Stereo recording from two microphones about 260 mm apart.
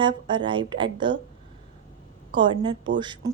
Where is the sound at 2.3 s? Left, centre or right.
Centre.